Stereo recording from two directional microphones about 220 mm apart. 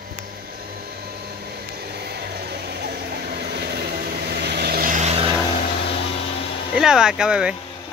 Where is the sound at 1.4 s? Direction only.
45° right (ahead or behind); by 5.3 s 30° right (ahead or behind).